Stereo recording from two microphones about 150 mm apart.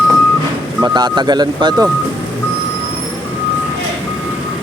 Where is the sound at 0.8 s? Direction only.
30° right (ahead or behind).